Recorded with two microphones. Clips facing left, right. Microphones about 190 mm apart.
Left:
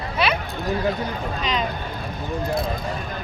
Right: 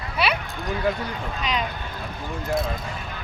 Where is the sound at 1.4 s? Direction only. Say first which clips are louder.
Left 1 dB; 10° right (ahead or behind).